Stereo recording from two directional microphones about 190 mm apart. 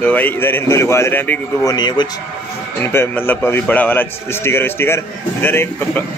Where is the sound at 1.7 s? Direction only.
25° left (ahead or behind).